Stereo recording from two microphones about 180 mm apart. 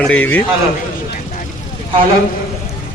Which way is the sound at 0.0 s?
10° left (ahead or behind).